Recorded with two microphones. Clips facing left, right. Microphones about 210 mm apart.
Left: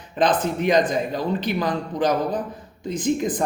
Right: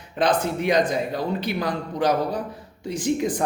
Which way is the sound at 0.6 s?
60° right (ahead or behind).